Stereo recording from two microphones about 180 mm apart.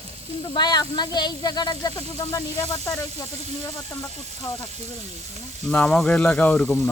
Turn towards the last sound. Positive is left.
turn(degrees=10)  # may be behind; listen again after turning